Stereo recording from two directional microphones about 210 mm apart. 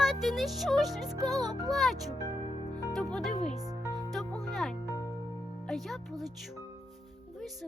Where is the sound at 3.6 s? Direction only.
15° right (ahead or behind).